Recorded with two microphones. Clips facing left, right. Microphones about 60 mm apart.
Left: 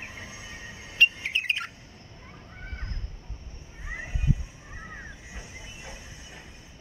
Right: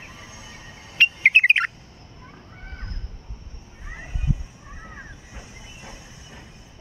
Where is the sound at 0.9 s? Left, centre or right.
Right.